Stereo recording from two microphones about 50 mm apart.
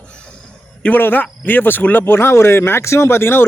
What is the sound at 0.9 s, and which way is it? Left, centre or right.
A man's voice, left.